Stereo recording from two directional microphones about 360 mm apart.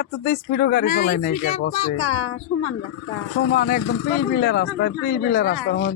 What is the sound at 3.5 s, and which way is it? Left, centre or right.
Speech, left.